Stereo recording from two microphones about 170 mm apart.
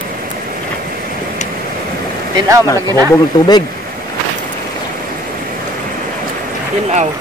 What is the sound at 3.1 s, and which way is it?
Speech, 25° left (ahead or behind).